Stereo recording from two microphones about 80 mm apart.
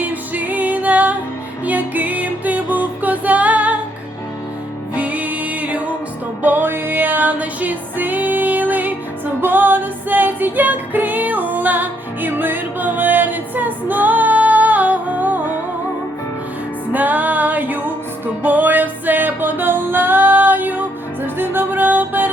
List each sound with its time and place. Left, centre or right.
0.0 s music: centre
4.9 s music: centre
16.9 s music: right